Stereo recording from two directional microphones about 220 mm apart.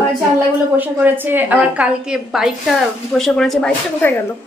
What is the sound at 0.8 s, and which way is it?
A woman's voice, 10° right (ahead or behind).